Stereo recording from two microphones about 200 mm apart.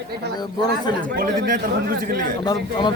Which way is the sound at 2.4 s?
20° left (ahead or behind).